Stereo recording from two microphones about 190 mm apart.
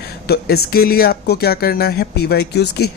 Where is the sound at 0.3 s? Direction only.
55° left (ahead or behind).